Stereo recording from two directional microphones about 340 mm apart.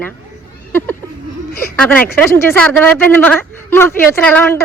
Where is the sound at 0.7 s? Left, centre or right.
Centre.